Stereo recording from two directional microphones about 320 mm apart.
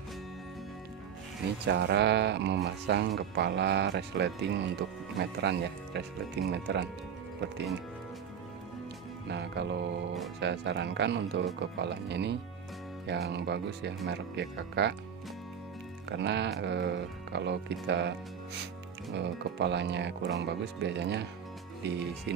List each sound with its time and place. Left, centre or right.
1.7 s speech: right
9.3 s music: right
10.4 s speech: right
16.1 s speech: right
19.1 s speech: right